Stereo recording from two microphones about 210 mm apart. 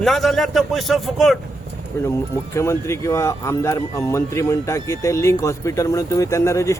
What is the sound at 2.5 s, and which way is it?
Speech, 15° left (ahead or behind).